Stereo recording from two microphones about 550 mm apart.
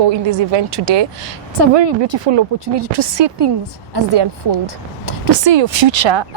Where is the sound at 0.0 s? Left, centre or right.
Right.